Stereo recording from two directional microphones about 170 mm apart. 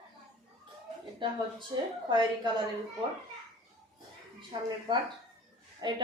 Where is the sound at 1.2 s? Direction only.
30° right (ahead or behind).